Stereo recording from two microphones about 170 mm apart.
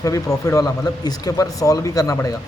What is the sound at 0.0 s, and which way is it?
Speech, 20° left (ahead or behind).